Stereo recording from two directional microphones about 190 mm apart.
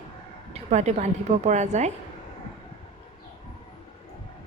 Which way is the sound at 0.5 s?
35° right (ahead or behind).